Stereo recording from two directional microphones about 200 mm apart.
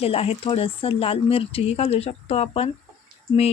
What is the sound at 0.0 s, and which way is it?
Speech, 30° left (ahead or behind).